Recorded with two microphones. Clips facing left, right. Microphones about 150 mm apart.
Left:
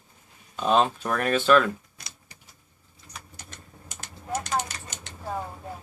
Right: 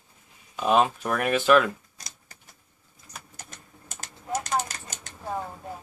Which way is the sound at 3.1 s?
45° right (ahead or behind).